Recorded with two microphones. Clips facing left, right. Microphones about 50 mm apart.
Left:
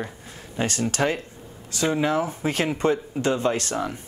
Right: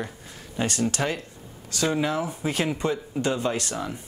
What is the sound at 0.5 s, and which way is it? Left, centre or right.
Speech, left.